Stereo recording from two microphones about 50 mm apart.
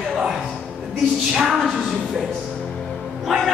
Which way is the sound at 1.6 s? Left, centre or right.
Centre.